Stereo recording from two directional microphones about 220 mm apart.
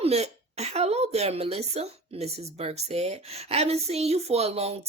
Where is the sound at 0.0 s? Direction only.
30° right (ahead or behind).